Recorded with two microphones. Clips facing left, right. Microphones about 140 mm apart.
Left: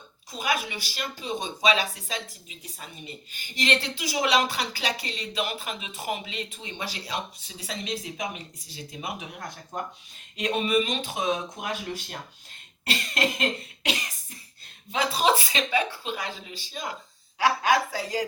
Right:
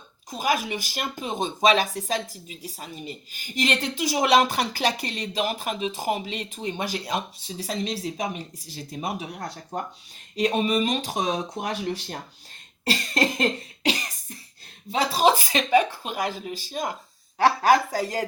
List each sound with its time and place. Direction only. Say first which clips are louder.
0.3 s a woman's voice: right 4 dB; 40° right (ahead or behind)
7.4 s speech: right 6 dB; 35° right (ahead or behind)
12.8 s cough: right 3 dB; 35° right (ahead or behind)
14.9 s a woman's voice: right 3 dB; 40° right (ahead or behind)
17.3 s speech: right 4 dB; 35° right (ahead or behind)